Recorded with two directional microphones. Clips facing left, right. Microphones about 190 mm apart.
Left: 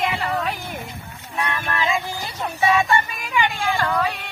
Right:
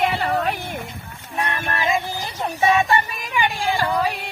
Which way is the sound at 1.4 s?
40° right (ahead or behind).